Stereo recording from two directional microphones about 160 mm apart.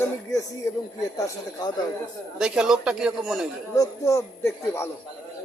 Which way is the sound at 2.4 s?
5° right (ahead or behind).